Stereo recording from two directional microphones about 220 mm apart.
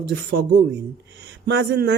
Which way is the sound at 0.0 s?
50° right (ahead or behind).